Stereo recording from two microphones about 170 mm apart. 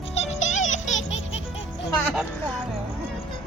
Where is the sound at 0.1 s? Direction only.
40° left (ahead or behind).